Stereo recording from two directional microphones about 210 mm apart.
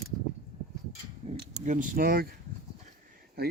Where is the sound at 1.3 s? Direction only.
35° right (ahead or behind).